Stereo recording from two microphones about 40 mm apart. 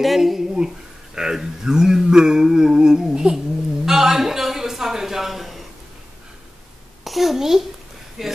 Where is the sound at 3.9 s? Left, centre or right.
Centre.